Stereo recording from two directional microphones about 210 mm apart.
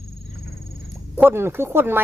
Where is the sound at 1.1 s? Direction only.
10° right (ahead or behind).